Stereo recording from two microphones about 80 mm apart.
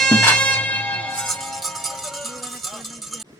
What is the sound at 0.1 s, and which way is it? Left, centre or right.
Bagpipes, left.